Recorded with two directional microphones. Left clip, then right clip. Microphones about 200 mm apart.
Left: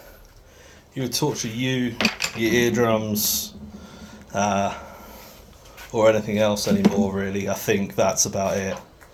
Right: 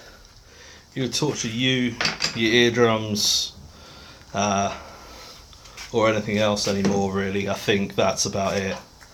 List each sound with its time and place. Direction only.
0.9 s speech: 20° right (ahead or behind)
4.3 s speech: 10° right (ahead or behind)
5.9 s speech: 20° right (ahead or behind)